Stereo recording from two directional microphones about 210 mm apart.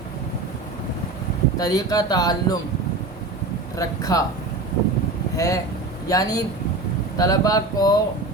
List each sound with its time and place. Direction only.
1.5 s speech: 15° left (ahead or behind)
3.8 s speech: 15° left (ahead or behind)
5.4 s speech: 15° left (ahead or behind)